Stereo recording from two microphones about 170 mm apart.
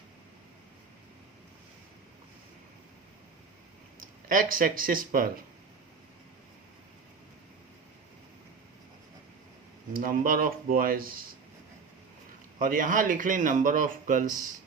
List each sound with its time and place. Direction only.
4.3 s speech: 55° right (ahead or behind)
9.9 s speech: 55° right (ahead or behind)
12.5 s speech: 50° right (ahead or behind)